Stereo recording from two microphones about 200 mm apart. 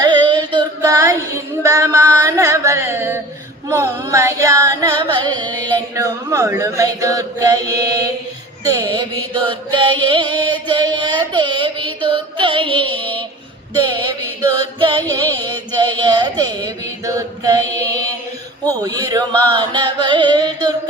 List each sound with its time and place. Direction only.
0.0 s female singing: 20° right (ahead or behind)
3.7 s singing: 15° right (ahead or behind)
8.6 s mantra: 20° right (ahead or behind)
12.0 s music: 25° right (ahead or behind)
14.8 s music: 25° right (ahead or behind)
15.1 s carnatic music: 20° right (ahead or behind)
18.6 s a sound: 20° right (ahead or behind)